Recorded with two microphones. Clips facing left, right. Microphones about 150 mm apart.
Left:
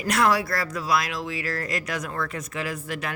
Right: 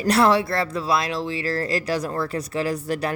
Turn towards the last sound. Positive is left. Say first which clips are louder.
# right 6 dB
turn(degrees=-35)  # may be behind; listen again after turning